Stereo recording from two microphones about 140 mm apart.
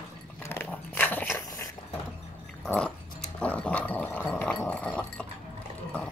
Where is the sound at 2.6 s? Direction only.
10° left (ahead or behind).